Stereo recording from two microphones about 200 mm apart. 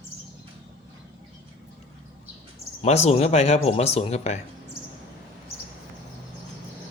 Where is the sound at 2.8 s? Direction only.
30° left (ahead or behind).